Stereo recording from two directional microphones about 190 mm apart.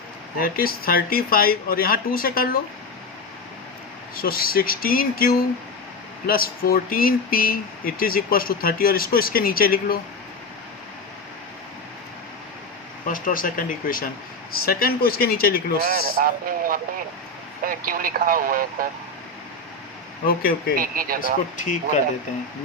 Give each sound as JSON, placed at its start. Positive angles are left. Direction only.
{"t": 0.3, "sound": "speech", "side_deg": 50}
{"t": 4.2, "sound": "speech", "side_deg": 50}
{"t": 13.1, "sound": "speech", "side_deg": 45}
{"t": 15.8, "sound": "speech", "side_deg": -50}
{"t": 20.2, "sound": "speech", "side_deg": 50}
{"t": 20.7, "sound": "speech", "side_deg": -50}
{"t": 21.6, "sound": "speech", "side_deg": 40}